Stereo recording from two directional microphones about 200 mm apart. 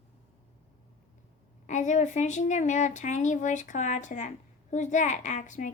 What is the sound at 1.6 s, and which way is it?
Speech, 40° left (ahead or behind).